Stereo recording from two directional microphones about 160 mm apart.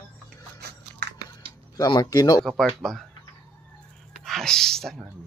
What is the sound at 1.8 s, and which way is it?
Speech, 25° left (ahead or behind).